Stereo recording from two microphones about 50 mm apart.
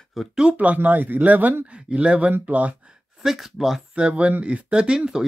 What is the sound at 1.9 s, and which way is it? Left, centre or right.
Speech, right.